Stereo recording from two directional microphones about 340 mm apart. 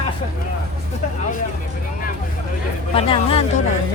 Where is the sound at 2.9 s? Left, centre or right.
Centre.